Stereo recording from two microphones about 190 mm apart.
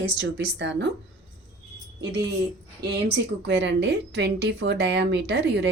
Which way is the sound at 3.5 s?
65° right (ahead or behind).